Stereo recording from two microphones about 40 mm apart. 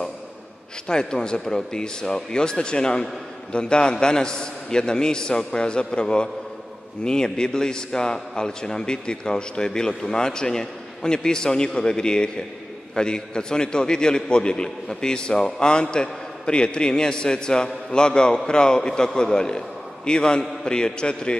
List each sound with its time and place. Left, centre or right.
0.8 s a man's voice: centre